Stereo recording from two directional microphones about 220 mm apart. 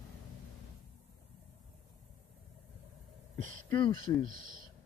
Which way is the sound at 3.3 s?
35° right (ahead or behind).